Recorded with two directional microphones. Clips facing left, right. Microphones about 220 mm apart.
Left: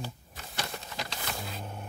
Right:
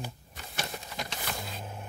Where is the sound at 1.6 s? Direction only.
5° right (ahead or behind).